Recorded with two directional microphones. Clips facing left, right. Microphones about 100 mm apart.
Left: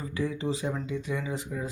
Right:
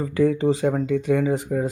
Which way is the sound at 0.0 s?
55° right (ahead or behind).